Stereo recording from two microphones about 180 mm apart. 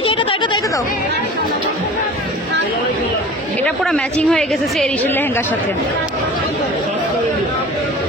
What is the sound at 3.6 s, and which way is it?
A woman's voice, 5° left (ahead or behind).